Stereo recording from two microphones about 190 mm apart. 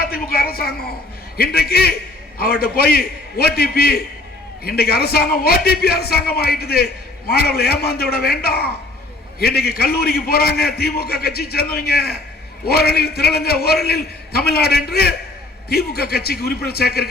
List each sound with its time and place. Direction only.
0.0 s a woman's voice: 50° left (ahead or behind)